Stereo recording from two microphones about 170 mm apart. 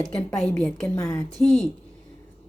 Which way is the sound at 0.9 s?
20° left (ahead or behind).